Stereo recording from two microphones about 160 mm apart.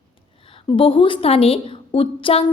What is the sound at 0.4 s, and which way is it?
A woman's voice, 35° left (ahead or behind).